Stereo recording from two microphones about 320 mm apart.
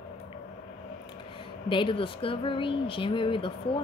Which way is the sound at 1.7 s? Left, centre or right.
Centre.